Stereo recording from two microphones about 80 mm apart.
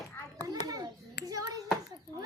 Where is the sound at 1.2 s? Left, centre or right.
Right.